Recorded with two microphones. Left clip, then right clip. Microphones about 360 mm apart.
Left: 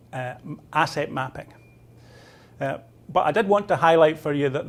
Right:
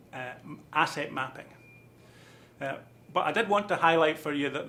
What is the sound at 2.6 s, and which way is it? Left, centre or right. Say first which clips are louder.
A man's voice: left 7 dB; left.